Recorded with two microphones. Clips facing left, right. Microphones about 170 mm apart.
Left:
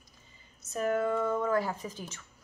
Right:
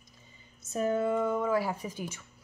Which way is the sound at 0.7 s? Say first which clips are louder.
Right 1 dB; 25° right (ahead or behind).